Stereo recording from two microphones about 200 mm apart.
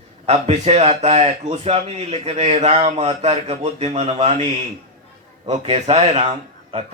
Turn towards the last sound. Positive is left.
turn(degrees=-30)  # may be behind; listen again after turning